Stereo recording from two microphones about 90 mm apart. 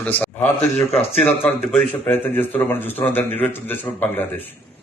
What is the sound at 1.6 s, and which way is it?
Speech, 5° left (ahead or behind).